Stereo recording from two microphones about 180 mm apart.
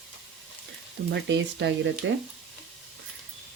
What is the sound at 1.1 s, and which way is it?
Speech, 80° right.